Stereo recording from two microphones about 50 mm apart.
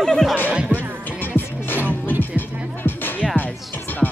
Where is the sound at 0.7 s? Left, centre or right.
Left.